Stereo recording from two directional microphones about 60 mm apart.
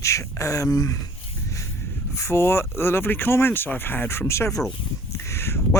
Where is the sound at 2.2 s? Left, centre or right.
Left.